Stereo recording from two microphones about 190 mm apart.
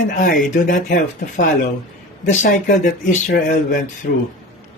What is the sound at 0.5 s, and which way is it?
Speech, 45° left (ahead or behind).